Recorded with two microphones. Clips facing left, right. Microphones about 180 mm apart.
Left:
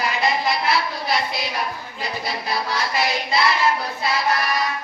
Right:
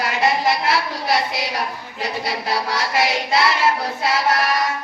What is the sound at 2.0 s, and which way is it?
A woman's voice, 85° right.